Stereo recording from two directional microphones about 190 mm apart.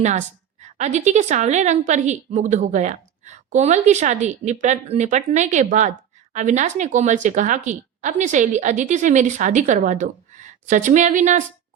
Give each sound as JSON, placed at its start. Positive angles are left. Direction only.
{"t": 0.0, "sound": "a woman's voice", "side_deg": -40}